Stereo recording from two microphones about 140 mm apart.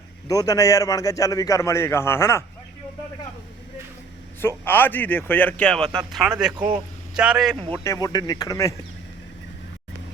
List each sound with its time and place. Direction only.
0.3 s a man's voice: 25° left (ahead or behind)
4.4 s a man's voice: 15° left (ahead or behind); by 7.5 s 5° right (ahead or behind)
7.9 s a man's voice: 25° left (ahead or behind)